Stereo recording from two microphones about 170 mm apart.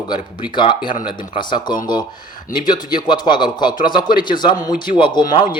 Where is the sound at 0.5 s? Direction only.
30° left (ahead or behind).